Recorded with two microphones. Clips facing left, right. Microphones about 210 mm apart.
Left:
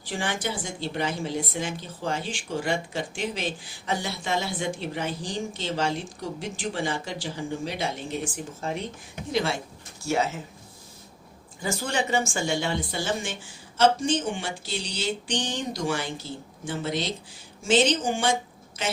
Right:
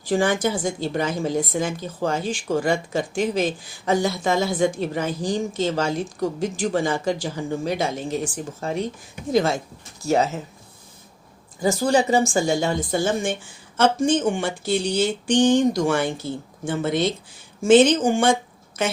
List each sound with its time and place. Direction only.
0.0 s a woman's voice: 45° right (ahead or behind)
11.6 s a woman's voice: 35° right (ahead or behind)